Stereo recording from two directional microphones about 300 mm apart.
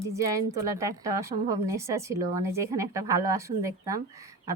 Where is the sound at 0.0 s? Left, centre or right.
Centre.